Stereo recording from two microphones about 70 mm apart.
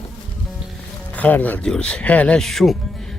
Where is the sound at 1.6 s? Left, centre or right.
Centre.